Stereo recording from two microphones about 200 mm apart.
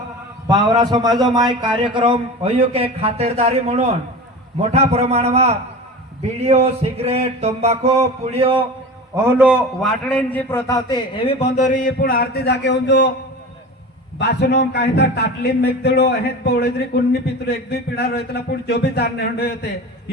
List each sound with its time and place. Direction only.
0.4 s a man's voice: 20° right (ahead or behind)
4.7 s a sound: 30° right (ahead or behind)
9.1 s a man's voice: 10° right (ahead or behind)
10.1 s a man's voice: 10° left (ahead or behind); by 13.1 s 60° left (ahead or behind)
14.2 s a man's voice: 55° left (ahead or behind)